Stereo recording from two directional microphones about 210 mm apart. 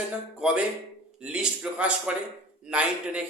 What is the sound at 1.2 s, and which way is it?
Speech, 5° right (ahead or behind).